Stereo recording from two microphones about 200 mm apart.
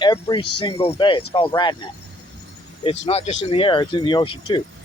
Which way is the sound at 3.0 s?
30° left (ahead or behind).